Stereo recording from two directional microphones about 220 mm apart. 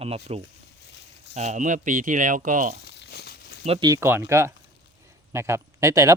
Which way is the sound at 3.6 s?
25° right (ahead or behind).